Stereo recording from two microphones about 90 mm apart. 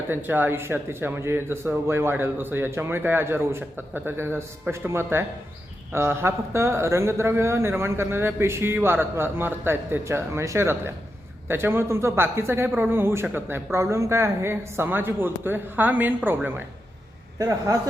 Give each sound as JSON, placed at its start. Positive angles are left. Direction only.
{"t": 0.1, "sound": "speech", "side_deg": -20}
{"t": 17.3, "sound": "a man's voice", "side_deg": -40}